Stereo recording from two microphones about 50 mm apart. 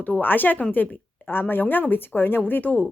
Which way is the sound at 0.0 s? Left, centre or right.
Left.